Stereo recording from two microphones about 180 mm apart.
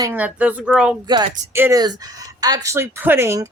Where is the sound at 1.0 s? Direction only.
25° right (ahead or behind).